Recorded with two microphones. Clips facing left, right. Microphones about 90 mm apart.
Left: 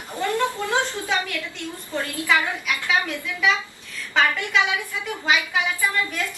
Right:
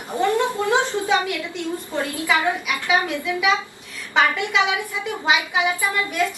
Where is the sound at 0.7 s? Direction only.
20° right (ahead or behind).